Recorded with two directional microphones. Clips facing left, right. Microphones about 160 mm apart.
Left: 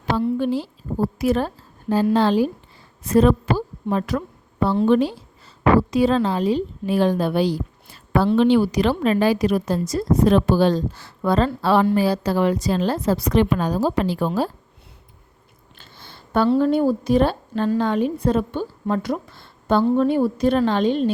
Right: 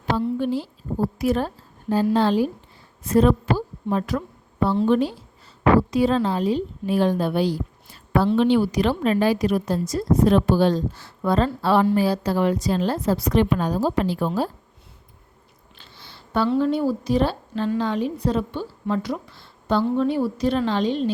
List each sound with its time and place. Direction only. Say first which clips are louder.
0.3 s a woman's voice: left 2 dB; 90° left
3.8 s speech: left 1 dB; 75° left (ahead or behind)
4.6 s a woman's voice: left 2 dB; 90° left
15.8 s a woman's voice: left 2 dB; 50° left (ahead or behind)